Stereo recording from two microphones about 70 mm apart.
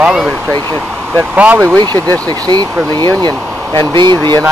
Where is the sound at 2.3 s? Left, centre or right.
Right.